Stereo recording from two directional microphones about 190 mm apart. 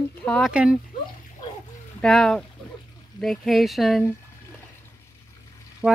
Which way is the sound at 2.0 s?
5° left (ahead or behind).